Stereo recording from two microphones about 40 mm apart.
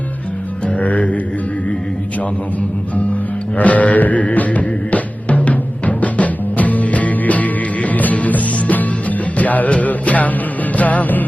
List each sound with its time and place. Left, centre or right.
0.7 s speech: left
2.6 s music: left